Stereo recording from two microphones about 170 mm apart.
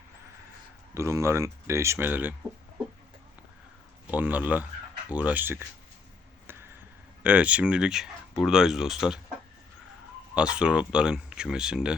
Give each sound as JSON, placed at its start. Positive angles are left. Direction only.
{"t": 0.9, "sound": "speech", "side_deg": -15}
{"t": 4.1, "sound": "speech", "side_deg": -10}
{"t": 7.2, "sound": "speech", "side_deg": -10}
{"t": 10.3, "sound": "speech", "side_deg": -5}